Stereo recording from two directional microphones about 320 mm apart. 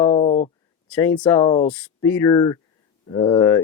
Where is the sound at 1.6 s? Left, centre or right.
Centre.